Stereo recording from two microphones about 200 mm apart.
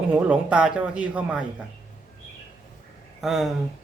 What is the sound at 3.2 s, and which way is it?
Speech, centre (ahead or behind).